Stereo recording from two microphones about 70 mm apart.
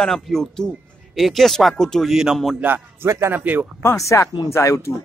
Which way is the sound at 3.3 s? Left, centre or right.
Right.